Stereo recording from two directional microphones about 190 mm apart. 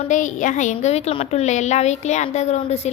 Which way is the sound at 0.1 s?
40° left (ahead or behind).